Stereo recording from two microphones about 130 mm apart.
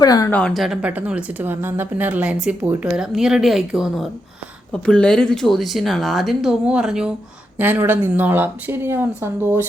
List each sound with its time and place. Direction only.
0.0 s a woman's voice: 30° left (ahead or behind)
0.3 s a woman's voice: 10° left (ahead or behind)
4.7 s a woman's voice: 10° left (ahead or behind); by 9.6 s 15° right (ahead or behind)